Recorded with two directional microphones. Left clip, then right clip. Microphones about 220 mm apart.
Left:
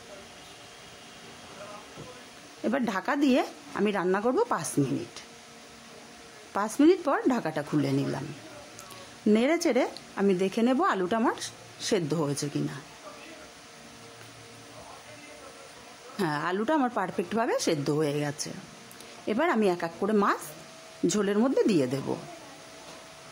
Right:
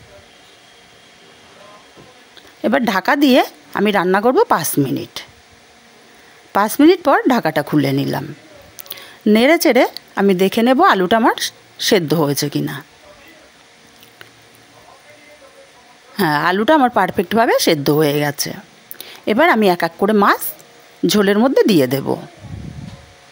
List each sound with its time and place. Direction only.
2.6 s speech: 35° right (ahead or behind)
6.5 s speech: 35° right (ahead or behind)
16.2 s speech: 35° right (ahead or behind)